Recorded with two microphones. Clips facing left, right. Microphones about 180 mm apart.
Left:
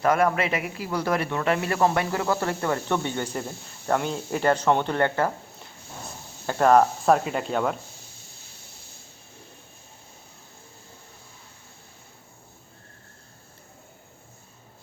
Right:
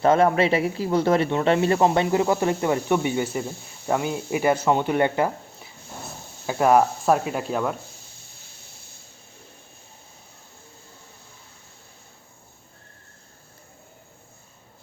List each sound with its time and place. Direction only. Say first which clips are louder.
0.0 s speech: right 4 dB; 25° right (ahead or behind); by 7.8 s centre (ahead or behind)